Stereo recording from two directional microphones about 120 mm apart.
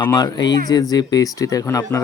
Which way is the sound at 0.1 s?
30° left (ahead or behind).